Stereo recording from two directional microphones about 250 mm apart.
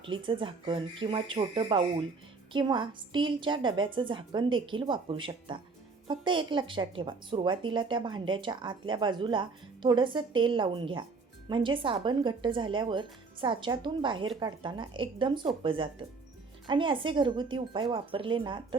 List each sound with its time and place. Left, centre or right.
0.0 s speech: centre